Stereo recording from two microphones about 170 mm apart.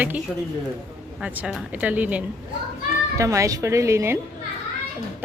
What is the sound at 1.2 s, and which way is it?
Speech, 5° right (ahead or behind).